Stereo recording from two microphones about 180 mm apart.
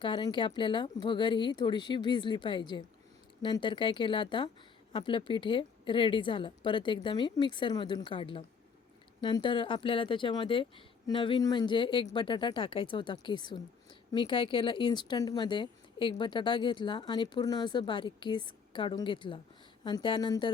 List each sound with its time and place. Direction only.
0.0 s speech: 25° left (ahead or behind)